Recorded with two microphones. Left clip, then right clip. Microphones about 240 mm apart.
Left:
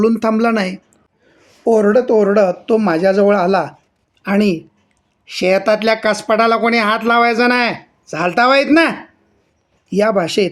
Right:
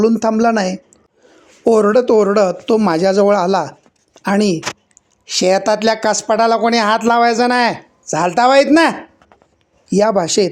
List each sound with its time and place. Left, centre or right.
0.0 s speech: centre
1.6 s speech: right; by 10.5 s centre